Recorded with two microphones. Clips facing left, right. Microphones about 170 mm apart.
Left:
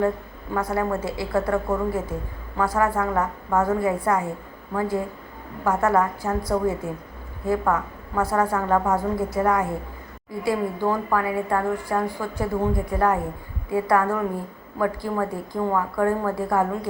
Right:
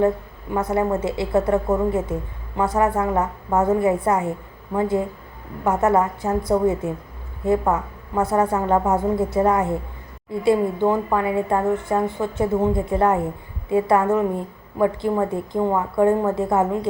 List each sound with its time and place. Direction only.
0.5 s a woman's voice: 20° right (ahead or behind)